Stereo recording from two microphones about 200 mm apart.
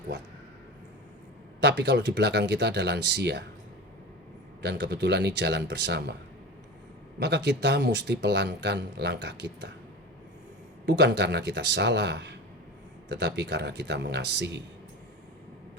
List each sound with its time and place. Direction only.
1.6 s speech: 60° right (ahead or behind)
4.6 s speech: 55° right (ahead or behind)
7.2 s speech: 60° right (ahead or behind)
10.8 s speech: 60° right (ahead or behind)